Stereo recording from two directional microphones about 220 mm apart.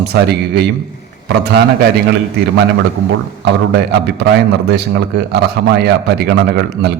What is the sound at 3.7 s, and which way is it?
A man's voice, 50° right (ahead or behind).